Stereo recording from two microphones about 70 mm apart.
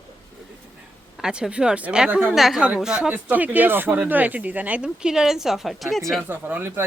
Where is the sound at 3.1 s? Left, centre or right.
Right; by 6.0 s centre.